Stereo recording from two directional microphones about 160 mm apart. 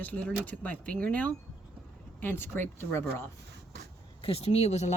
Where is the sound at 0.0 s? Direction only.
10° left (ahead or behind).